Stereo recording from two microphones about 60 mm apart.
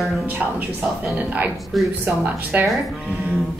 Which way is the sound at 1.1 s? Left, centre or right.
Right.